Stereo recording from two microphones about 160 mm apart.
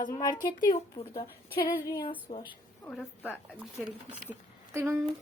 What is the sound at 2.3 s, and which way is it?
Speech, 35° left (ahead or behind).